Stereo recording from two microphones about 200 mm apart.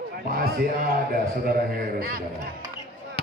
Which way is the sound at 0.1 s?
45° right (ahead or behind).